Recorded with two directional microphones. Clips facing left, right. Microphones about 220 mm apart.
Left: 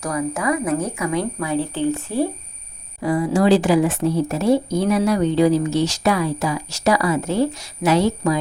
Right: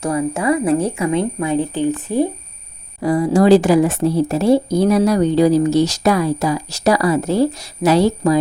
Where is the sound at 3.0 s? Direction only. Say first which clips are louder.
Right 4 dB; 40° right (ahead or behind).